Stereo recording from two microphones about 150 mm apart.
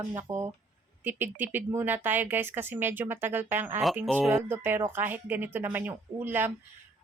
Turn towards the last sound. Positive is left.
turn(degrees=-15)  # may be behind; listen again after turning